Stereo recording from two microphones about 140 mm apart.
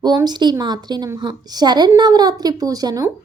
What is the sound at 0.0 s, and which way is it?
A woman's voice, 30° right (ahead or behind).